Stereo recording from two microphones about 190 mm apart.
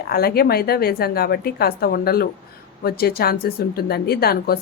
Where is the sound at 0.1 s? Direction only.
55° left (ahead or behind).